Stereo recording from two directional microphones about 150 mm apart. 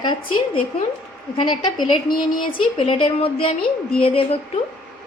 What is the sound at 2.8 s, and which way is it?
A woman's voice, 40° left (ahead or behind).